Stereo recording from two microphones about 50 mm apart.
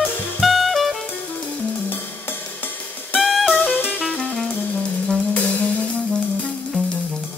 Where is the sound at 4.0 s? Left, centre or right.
Centre.